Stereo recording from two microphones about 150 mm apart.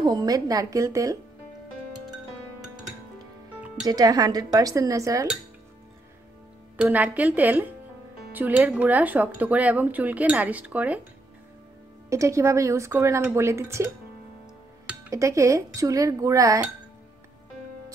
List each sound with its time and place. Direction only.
0.0 s speech: 25° right (ahead or behind)
3.8 s speech: 25° right (ahead or behind)
6.8 s speech: 10° right (ahead or behind)
12.1 s speech: 20° right (ahead or behind)
15.0 s speech: 20° right (ahead or behind)